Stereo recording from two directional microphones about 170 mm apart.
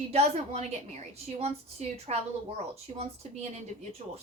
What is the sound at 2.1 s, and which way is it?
Speech, 40° right (ahead or behind).